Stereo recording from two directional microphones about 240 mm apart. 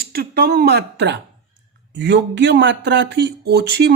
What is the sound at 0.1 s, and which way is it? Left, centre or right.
A man's voice, right.